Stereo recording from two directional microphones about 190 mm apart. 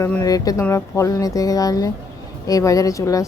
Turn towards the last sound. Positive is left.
turn(degrees=15)  # may be behind; listen again after turning